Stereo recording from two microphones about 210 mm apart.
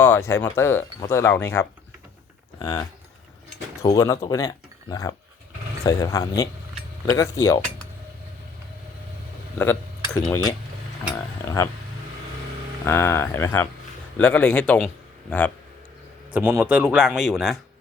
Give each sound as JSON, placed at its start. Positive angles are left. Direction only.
{"t": 0.0, "sound": "speech", "side_deg": 15}
{"t": 3.8, "sound": "speech", "side_deg": 15}
{"t": 9.6, "sound": "speech", "side_deg": 5}
{"t": 12.8, "sound": "speech", "side_deg": 10}
{"t": 16.3, "sound": "speech", "side_deg": -10}